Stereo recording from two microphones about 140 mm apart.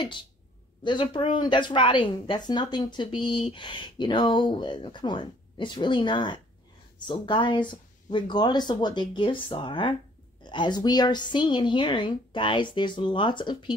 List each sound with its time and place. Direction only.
0.8 s speech: 35° left (ahead or behind)